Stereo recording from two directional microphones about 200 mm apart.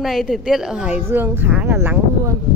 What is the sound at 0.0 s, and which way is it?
Speech, centre (ahead or behind).